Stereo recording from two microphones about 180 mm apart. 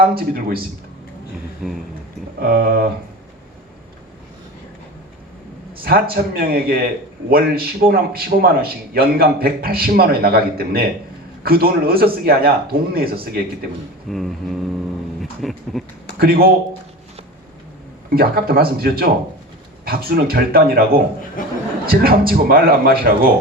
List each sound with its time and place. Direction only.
0.0 s a man's voice: 55° right (ahead or behind)
1.6 s a sound: centre (ahead or behind)
2.4 s a man's voice: 55° right (ahead or behind)
5.8 s a man's voice: 55° right (ahead or behind)
14.1 s a sound: centre (ahead or behind)
16.1 s a man's voice: 55° right (ahead or behind)
18.1 s a man's voice: 55° right (ahead or behind)
21.4 s a man's voice: 50° left (ahead or behind)
21.8 s a man's voice: 55° right (ahead or behind)